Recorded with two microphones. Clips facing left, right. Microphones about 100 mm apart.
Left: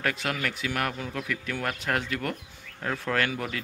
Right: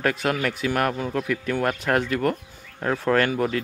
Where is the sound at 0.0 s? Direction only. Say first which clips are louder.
Right 6 dB; 45° right (ahead or behind).